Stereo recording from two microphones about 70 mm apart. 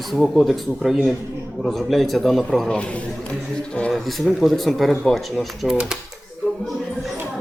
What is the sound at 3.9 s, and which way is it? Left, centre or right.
A man's voice, centre.